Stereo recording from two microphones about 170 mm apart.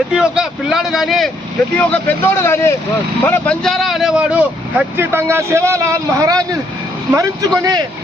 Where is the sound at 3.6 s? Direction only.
Centre (ahead or behind); by 6.5 s 20° right (ahead or behind).